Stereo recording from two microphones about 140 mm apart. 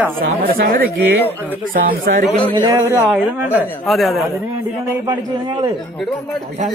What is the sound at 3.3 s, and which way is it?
Speech, 10° right (ahead or behind).